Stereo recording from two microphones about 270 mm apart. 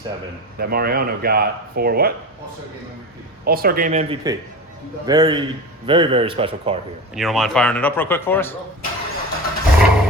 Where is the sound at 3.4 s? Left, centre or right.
Right.